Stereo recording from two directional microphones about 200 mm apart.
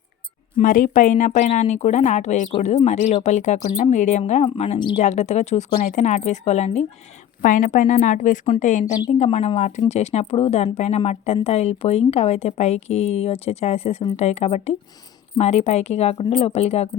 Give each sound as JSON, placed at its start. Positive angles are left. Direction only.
{"t": 0.6, "sound": "a woman's voice", "side_deg": 40}